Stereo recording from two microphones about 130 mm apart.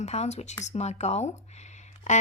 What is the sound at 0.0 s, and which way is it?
A woman's voice, 60° left (ahead or behind).